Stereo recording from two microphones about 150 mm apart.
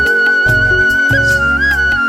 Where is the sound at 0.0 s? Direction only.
Centre (ahead or behind).